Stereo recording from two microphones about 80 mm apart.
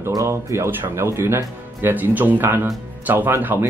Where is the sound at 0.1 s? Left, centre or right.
Right.